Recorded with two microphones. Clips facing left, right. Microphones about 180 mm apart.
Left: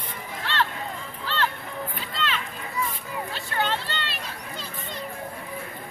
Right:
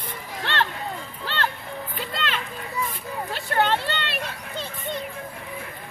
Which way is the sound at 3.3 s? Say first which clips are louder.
Right 6 dB; 60° right (ahead or behind).